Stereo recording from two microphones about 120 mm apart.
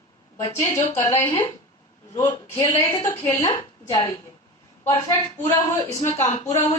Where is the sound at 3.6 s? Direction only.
30° left (ahead or behind).